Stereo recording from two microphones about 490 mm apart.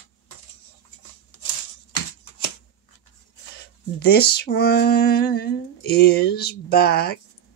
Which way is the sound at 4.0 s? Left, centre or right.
Centre.